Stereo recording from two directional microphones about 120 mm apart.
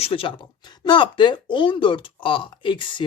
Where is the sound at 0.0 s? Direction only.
50° left (ahead or behind).